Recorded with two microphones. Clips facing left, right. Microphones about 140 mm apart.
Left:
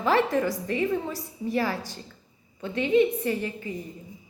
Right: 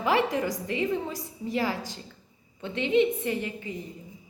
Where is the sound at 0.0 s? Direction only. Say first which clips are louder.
Left 2 dB; 15° right (ahead or behind).